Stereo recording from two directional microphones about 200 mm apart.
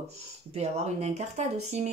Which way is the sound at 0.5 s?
35° right (ahead or behind).